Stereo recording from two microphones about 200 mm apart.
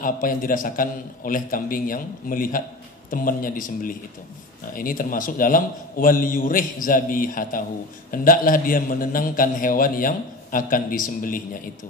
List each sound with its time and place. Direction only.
0.0 s a man's voice: 45° left (ahead or behind)